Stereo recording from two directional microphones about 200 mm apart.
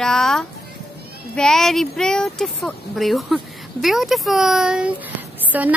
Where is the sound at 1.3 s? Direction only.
5° left (ahead or behind).